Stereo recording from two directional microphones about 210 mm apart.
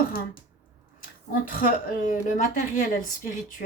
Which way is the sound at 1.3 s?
45° left (ahead or behind).